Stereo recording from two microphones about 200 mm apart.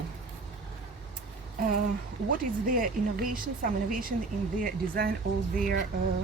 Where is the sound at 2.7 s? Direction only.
45° right (ahead or behind).